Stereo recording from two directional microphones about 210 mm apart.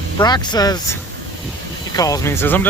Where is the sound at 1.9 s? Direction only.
15° left (ahead or behind).